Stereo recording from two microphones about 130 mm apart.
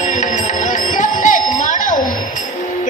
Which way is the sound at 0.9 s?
75° left (ahead or behind).